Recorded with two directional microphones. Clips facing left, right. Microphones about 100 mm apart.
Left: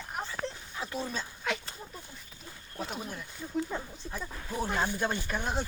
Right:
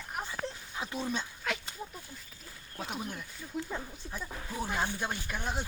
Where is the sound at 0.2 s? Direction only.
Centre (ahead or behind).